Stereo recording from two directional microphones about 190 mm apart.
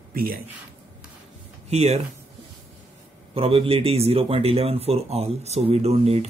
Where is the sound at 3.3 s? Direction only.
30° right (ahead or behind).